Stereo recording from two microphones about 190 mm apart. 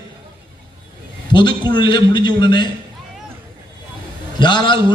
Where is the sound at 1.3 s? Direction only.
25° left (ahead or behind).